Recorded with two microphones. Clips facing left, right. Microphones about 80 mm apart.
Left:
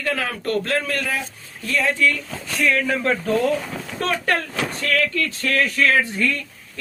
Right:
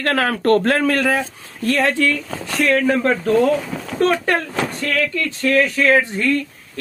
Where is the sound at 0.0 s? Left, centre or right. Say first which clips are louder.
Right 7 dB; right.